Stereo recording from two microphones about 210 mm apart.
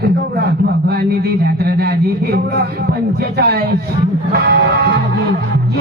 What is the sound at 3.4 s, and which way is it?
Speech, 50° right (ahead or behind).